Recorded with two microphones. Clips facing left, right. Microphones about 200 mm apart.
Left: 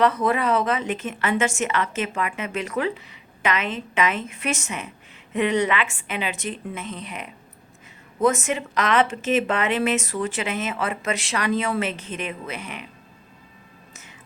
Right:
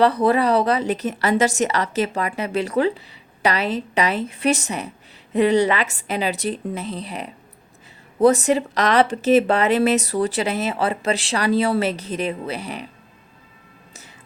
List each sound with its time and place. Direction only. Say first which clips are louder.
0.0 s speech: right 4 dB; 35° right (ahead or behind)